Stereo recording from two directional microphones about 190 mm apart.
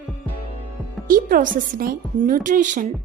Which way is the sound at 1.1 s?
50° right (ahead or behind).